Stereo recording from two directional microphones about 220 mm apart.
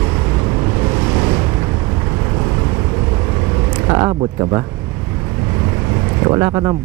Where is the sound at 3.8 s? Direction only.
20° right (ahead or behind).